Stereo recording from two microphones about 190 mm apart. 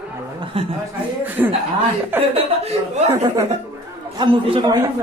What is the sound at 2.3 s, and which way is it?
A man's voice, 30° right (ahead or behind).